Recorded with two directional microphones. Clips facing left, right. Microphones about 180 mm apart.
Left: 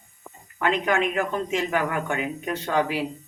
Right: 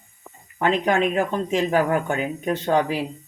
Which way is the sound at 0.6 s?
35° right (ahead or behind).